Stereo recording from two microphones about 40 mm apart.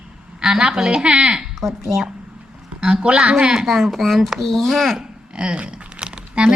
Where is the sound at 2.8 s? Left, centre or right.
Right.